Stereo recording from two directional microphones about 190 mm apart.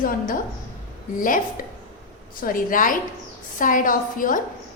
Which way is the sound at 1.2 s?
45° left (ahead or behind).